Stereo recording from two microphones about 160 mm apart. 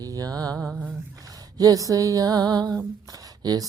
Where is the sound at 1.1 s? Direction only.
20° right (ahead or behind).